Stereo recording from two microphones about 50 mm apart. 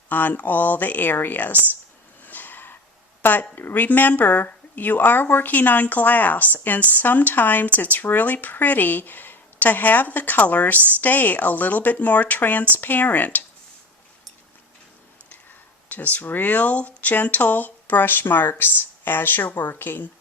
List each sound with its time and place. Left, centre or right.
0.1 s speech: left
2.2 s a sound: left
3.2 s speech: left
15.9 s speech: left